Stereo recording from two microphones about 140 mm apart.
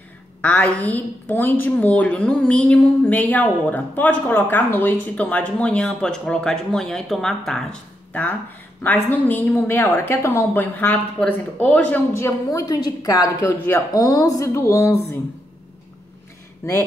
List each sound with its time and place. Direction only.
0.4 s a woman's voice: 10° left (ahead or behind)
9.5 s a woman's voice: 15° left (ahead or behind)
16.6 s a woman's voice: 20° left (ahead or behind)